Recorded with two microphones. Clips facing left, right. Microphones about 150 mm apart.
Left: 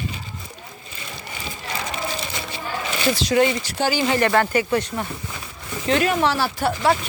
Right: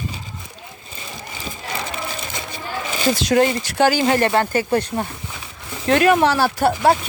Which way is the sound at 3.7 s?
65° right (ahead or behind).